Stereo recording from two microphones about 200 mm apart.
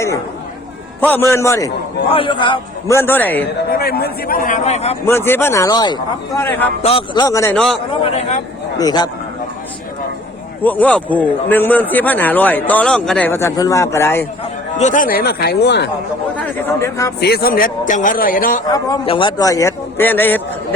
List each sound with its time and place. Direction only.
1.0 s a man's voice: 10° left (ahead or behind)
3.7 s a man's voice: 50° left (ahead or behind); by 4.9 s 35° left (ahead or behind)
5.0 s a man's voice: 10° left (ahead or behind)
6.8 s a man's voice: 25° left (ahead or behind)
7.5 s a man's voice: centre (ahead or behind)
8.8 s a man's voice: 20° left (ahead or behind)
10.6 s a man's voice: 10° left (ahead or behind)
14.8 s a man's voice: 40° left (ahead or behind); by 15.9 s 55° left (ahead or behind)
16.3 s a man's voice: 10° left (ahead or behind)
17.2 s a man's voice: 55° left (ahead or behind)
18.7 s a man's voice: 20° left (ahead or behind)